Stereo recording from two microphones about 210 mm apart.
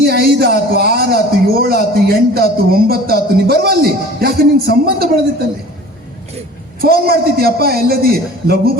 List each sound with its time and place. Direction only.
0.0 s a sound: 50° right (ahead or behind)
0.7 s a man's voice: 50° right (ahead or behind)
6.8 s a man's voice: 45° right (ahead or behind)